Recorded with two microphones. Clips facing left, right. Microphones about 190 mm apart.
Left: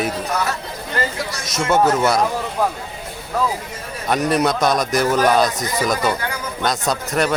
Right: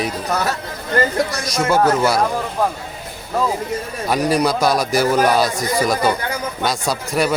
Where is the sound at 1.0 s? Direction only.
45° right (ahead or behind).